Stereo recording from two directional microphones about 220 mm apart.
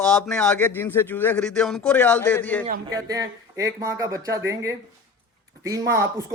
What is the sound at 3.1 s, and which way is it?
Speech, 15° right (ahead or behind).